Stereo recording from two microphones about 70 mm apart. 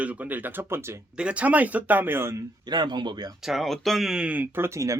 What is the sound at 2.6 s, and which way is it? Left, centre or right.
Speech, right.